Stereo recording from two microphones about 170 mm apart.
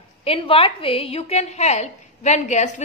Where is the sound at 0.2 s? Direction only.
35° left (ahead or behind).